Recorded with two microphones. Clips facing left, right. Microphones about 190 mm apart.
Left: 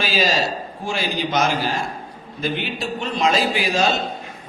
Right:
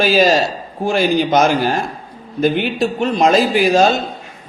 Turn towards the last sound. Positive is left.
turn(degrees=-45)  # may be behind; listen again after turning